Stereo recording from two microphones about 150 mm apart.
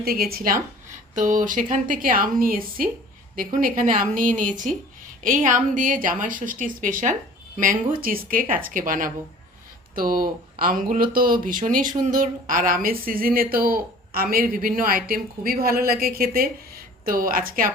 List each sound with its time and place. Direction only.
0.0 s a woman's voice: 90° right; by 9.1 s 65° right (ahead or behind)
9.9 s speech: 75° right (ahead or behind)
17.1 s speech: 70° right (ahead or behind)